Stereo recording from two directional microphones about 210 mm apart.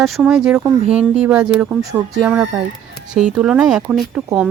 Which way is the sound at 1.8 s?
15° right (ahead or behind).